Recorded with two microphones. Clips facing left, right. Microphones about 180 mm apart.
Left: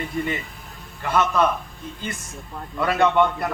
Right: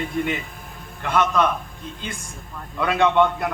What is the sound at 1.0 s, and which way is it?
Speech, 10° left (ahead or behind).